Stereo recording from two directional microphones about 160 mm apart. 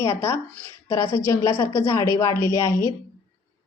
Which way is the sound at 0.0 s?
15° left (ahead or behind).